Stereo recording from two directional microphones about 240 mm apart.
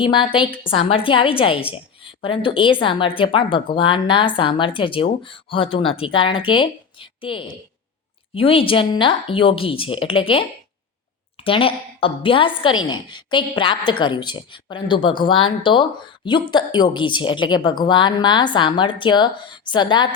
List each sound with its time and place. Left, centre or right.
0.0 s speech: left